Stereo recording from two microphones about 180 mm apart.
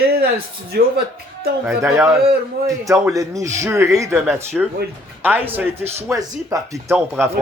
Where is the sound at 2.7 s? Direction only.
20° right (ahead or behind).